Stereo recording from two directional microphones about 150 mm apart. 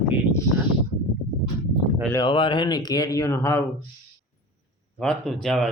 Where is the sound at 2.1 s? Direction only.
35° left (ahead or behind); by 3.7 s 20° left (ahead or behind).